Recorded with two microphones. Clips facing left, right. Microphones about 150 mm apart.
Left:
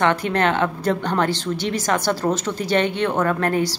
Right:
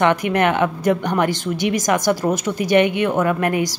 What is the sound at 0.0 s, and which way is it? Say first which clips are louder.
A woman's voice: right 2 dB; 15° right (ahead or behind).